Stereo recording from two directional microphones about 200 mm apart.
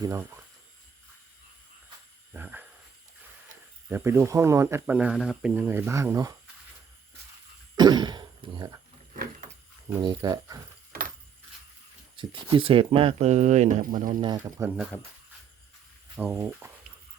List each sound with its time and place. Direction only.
0.0 s speech: 15° right (ahead or behind)
2.3 s speech: 10° right (ahead or behind)
3.8 s speech: 10° right (ahead or behind)
7.8 s throat clearing: 20° right (ahead or behind)
9.9 s speech: 20° right (ahead or behind)
12.1 s speech: 25° right (ahead or behind); by 14.2 s 45° right (ahead or behind)
14.2 s speech: 20° right (ahead or behind)
16.1 s speech: 10° right (ahead or behind)